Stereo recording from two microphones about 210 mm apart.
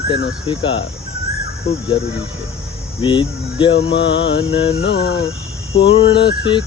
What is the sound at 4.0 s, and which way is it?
Mantra, 55° left (ahead or behind).